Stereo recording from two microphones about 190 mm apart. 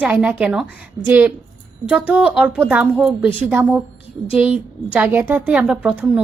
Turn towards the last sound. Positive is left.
turn(degrees=-5)  # may be behind; listen again after turning